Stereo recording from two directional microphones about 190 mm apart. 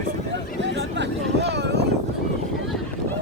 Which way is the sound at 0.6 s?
65° right (ahead or behind).